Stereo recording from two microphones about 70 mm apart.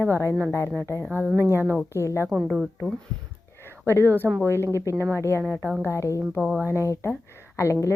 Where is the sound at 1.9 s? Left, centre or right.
Left.